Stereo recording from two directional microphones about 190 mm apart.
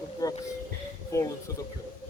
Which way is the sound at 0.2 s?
20° left (ahead or behind).